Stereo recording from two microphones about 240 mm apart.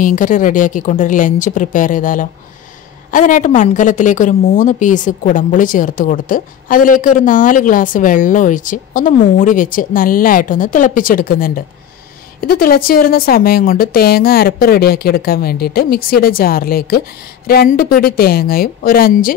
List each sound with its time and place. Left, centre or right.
0.0 s a woman's voice: left